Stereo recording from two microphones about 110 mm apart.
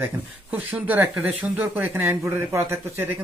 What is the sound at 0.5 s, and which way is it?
Speech, 15° right (ahead or behind).